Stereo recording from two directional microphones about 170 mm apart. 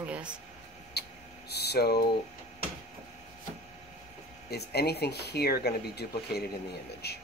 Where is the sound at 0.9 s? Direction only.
70° left (ahead or behind).